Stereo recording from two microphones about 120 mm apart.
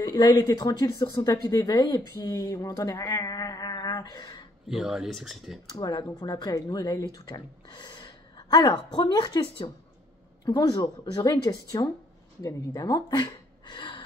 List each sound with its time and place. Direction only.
0.0 s speech: 35° left (ahead or behind)
4.6 s speech: 5° right (ahead or behind)
5.8 s speech: 35° left (ahead or behind)